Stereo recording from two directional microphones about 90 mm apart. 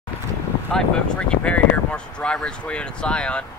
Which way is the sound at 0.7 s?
10° left (ahead or behind).